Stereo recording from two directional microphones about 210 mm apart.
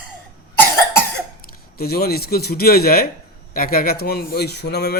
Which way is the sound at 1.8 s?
45° left (ahead or behind).